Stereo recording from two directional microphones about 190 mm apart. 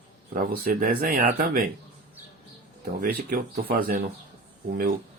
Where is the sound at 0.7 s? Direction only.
50° right (ahead or behind).